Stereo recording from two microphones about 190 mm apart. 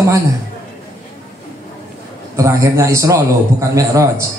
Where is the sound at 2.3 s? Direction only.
15° right (ahead or behind).